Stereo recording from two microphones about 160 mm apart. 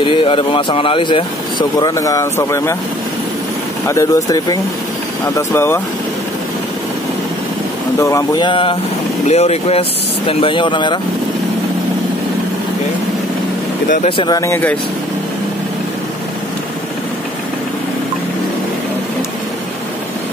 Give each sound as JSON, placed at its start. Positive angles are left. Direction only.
{"t": 0.0, "sound": "speech", "side_deg": 35}
{"t": 3.8, "sound": "speech", "side_deg": 20}
{"t": 8.0, "sound": "speech", "side_deg": 20}
{"t": 9.3, "sound": "speech", "side_deg": 40}
{"t": 14.0, "sound": "speech", "side_deg": 30}